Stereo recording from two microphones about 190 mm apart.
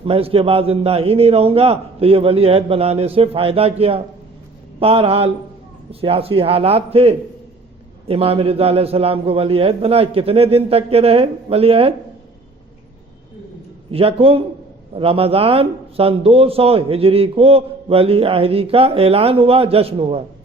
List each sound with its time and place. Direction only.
0.0 s speech: 30° right (ahead or behind)
13.9 s speech: 30° right (ahead or behind)